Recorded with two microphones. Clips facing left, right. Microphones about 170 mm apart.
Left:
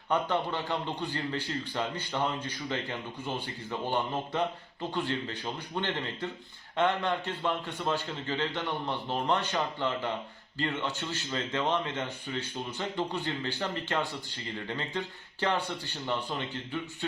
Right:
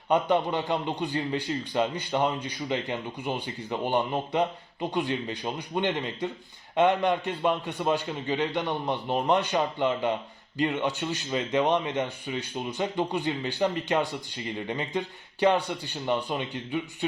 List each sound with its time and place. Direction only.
0.1 s speech: 15° right (ahead or behind)